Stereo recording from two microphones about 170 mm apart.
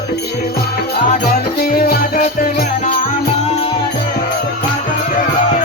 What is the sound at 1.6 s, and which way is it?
Music, 60° left (ahead or behind).